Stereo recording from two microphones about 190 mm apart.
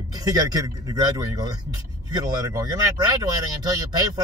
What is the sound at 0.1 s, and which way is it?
Speech, 20° right (ahead or behind).